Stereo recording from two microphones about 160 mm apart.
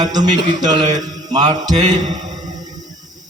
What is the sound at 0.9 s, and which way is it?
Mantra, 25° right (ahead or behind).